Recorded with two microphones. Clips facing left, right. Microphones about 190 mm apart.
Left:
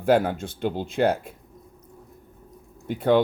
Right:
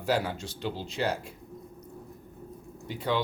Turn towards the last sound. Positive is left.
turn(degrees=55)  # may be behind; listen again after turning